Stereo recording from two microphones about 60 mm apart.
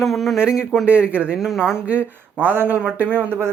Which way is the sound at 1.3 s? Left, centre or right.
Centre.